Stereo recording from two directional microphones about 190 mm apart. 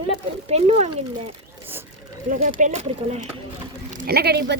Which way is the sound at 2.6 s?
40° right (ahead or behind).